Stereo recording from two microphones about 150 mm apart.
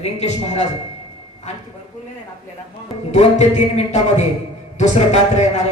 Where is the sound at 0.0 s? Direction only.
45° left (ahead or behind).